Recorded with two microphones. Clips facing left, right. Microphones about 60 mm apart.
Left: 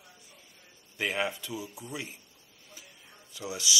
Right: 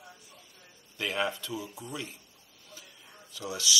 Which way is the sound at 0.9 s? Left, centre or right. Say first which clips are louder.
Even; centre.